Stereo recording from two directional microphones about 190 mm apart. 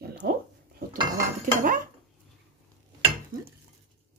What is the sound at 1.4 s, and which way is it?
Speech, 45° right (ahead or behind).